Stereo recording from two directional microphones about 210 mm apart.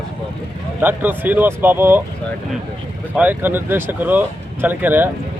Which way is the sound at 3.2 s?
10° right (ahead or behind).